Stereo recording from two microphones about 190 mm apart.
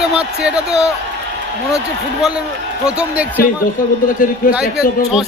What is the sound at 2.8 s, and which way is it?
Speech, 5° right (ahead or behind).